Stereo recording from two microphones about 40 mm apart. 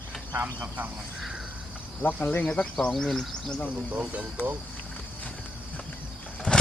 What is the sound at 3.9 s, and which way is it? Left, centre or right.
Speech, right.